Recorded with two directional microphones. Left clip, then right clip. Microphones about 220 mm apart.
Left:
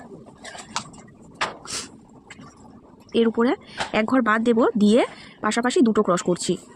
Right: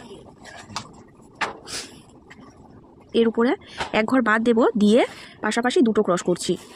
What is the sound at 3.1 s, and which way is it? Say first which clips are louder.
Speech: right 1 dB; centre (ahead or behind).